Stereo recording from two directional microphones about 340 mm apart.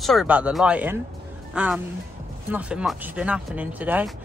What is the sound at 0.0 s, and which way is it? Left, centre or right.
A woman's voice, centre.